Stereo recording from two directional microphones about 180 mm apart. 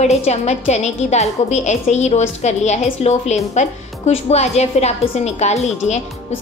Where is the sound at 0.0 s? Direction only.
35° left (ahead or behind).